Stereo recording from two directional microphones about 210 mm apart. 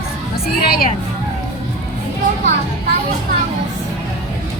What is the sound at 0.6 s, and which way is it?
Speech, 45° left (ahead or behind).